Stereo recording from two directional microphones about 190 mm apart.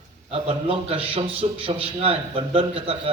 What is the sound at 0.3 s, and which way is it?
A man's voice, 30° right (ahead or behind).